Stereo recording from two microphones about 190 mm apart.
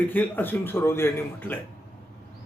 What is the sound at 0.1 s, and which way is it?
A man's voice, 10° left (ahead or behind).